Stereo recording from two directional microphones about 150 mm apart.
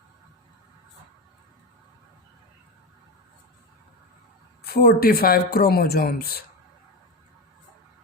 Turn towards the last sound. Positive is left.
turn(degrees=85)